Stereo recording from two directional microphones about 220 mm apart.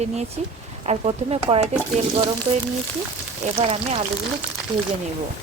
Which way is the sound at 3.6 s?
25° right (ahead or behind).